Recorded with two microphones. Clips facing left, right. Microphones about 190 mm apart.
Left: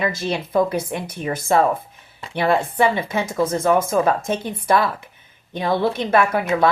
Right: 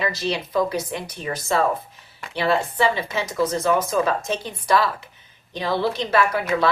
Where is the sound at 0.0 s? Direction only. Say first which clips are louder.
Left 2 dB; 50° left (ahead or behind).